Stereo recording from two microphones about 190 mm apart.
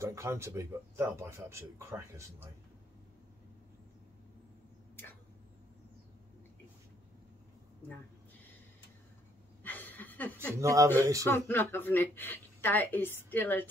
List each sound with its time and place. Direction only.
0.0 s speech: 15° right (ahead or behind)
9.6 s a sound: 10° left (ahead or behind)
10.6 s speech: 15° right (ahead or behind)
11.2 s a woman's voice: 10° left (ahead or behind)